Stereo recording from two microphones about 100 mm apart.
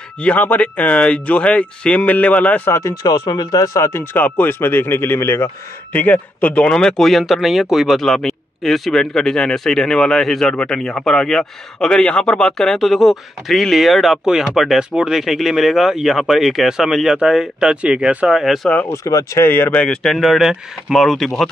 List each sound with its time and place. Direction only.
0.2 s speech: 15° left (ahead or behind)
2.7 s speech: 35° left (ahead or behind); by 18.7 s centre (ahead or behind)
18.9 s speech: 30° left (ahead or behind)
19.4 s speech: 20° left (ahead or behind); by 21.5 s centre (ahead or behind)